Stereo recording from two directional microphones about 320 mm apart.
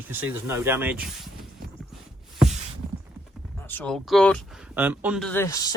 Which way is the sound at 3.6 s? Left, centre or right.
Centre.